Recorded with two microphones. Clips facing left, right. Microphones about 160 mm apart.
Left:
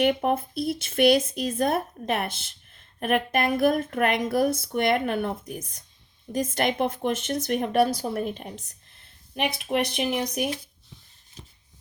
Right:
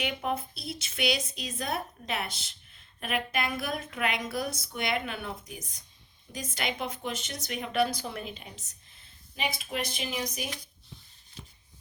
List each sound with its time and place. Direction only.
0.0 s speech: 55° left (ahead or behind)
9.3 s speech: 65° left (ahead or behind)